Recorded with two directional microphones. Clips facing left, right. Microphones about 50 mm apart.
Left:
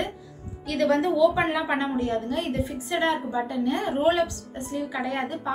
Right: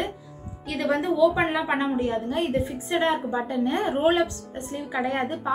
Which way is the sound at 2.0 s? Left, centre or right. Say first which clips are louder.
Right 1 dB; centre.